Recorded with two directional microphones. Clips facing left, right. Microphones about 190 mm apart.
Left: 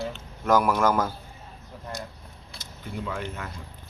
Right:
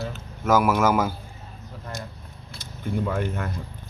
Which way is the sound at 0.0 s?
Centre (ahead or behind).